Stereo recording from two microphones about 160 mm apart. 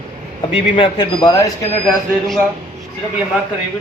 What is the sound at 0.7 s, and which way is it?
Mantra, 30° left (ahead or behind).